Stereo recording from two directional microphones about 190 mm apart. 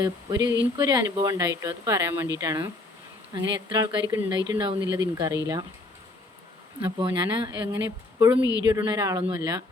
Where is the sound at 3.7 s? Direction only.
20° right (ahead or behind).